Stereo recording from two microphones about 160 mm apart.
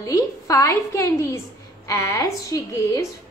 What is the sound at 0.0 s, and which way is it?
A woman's voice, 20° left (ahead or behind).